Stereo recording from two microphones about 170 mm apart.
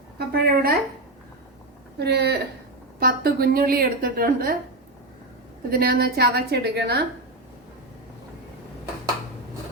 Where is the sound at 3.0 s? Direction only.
60° right (ahead or behind).